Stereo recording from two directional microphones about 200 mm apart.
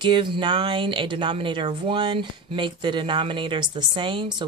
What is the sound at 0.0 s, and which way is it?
Speech, 25° right (ahead or behind).